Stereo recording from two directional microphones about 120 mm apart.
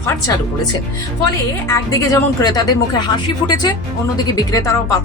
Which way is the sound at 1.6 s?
25° left (ahead or behind).